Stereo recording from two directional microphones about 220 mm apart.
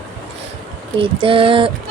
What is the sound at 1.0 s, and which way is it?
Speech, 25° right (ahead or behind).